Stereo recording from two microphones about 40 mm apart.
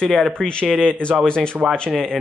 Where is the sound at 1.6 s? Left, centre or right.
Centre.